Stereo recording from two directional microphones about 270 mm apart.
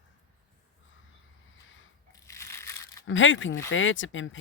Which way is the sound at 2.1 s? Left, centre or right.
Centre.